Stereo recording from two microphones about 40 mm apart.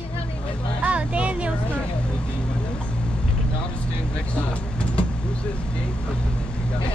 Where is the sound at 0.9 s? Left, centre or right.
Right.